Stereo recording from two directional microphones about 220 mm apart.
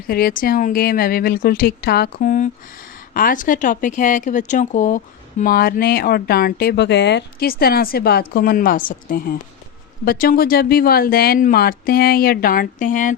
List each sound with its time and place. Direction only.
0.1 s speech: 40° left (ahead or behind)